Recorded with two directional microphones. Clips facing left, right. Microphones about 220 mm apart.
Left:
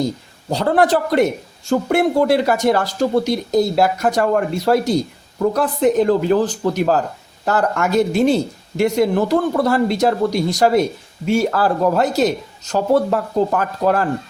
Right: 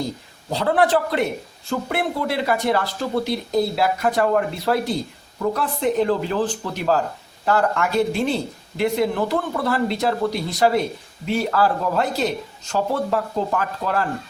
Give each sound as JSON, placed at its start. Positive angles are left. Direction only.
{"t": 0.5, "sound": "a man's voice", "side_deg": 45}